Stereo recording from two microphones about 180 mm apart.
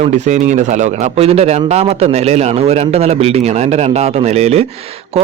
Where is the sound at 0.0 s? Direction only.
40° right (ahead or behind).